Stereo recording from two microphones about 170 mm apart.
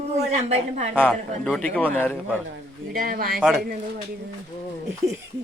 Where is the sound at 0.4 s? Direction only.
40° right (ahead or behind).